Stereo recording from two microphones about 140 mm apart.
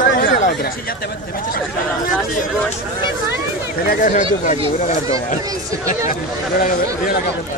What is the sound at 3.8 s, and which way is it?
Speech, 75° left (ahead or behind).